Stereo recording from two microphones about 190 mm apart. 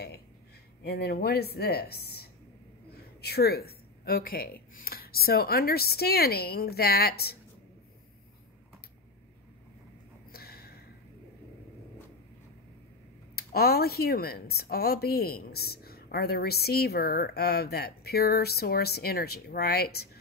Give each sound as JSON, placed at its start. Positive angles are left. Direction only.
{"t": 0.8, "sound": "speech", "side_deg": 55}
{"t": 10.3, "sound": "a sound", "side_deg": 55}
{"t": 13.4, "sound": "speech", "side_deg": 55}